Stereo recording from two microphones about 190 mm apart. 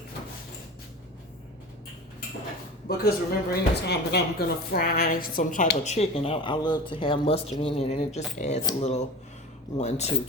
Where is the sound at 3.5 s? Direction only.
60° left (ahead or behind); by 8.2 s 35° left (ahead or behind).